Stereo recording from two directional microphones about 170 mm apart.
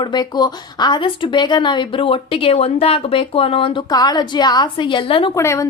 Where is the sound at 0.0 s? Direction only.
25° left (ahead or behind).